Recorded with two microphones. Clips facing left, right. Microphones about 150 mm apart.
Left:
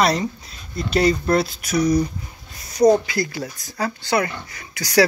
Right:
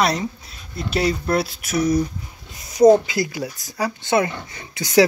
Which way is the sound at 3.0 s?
15° right (ahead or behind).